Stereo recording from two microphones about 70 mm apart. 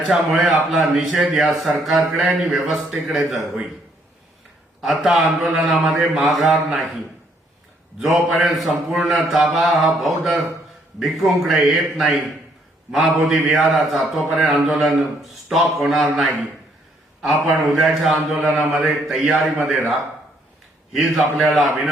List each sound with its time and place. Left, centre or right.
0.1 s a man's voice: centre
1.1 s a man's voice: right
1.4 s a man's voice: centre
4.8 s a man's voice: centre
7.9 s a man's voice: centre
19.2 s a man's voice: centre
20.9 s a man's voice: centre